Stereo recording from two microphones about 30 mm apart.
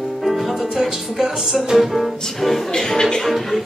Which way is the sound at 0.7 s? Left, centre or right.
Centre.